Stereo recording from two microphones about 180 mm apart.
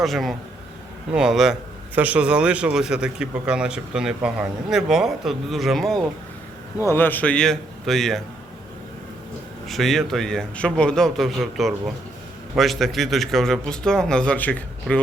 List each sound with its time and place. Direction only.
0.0 s a man's voice: centre (ahead or behind)
9.6 s a man's voice: centre (ahead or behind)